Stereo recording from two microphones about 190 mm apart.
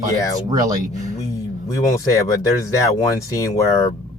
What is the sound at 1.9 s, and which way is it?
Speech, 15° left (ahead or behind).